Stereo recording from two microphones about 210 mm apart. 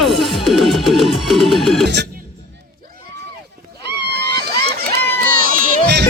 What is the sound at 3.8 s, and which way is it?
Run, 50° right (ahead or behind).